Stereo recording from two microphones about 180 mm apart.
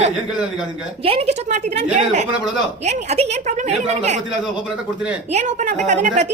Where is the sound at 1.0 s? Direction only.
35° right (ahead or behind).